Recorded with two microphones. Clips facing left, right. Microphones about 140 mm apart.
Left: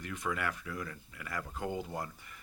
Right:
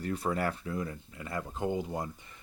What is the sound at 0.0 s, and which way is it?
Speech, 35° right (ahead or behind).